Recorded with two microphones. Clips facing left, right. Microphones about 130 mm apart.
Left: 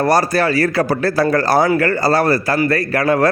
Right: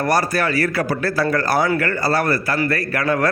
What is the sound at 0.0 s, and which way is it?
A man's voice, 35° left (ahead or behind).